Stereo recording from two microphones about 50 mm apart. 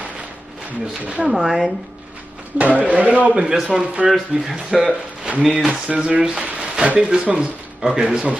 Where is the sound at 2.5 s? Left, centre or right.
Right.